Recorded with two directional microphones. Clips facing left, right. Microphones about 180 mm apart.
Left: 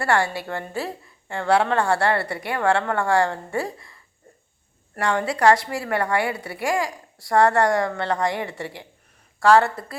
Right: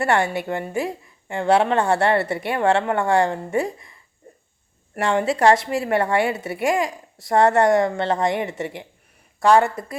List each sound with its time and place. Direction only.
0.0 s a woman's voice: 20° right (ahead or behind)
4.9 s a woman's voice: 25° right (ahead or behind)